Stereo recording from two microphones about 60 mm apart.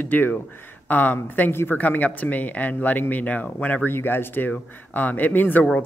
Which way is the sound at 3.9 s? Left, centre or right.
Left.